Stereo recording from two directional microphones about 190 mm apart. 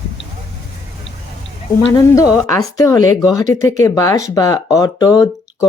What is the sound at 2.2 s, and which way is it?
Speech, 15° left (ahead or behind).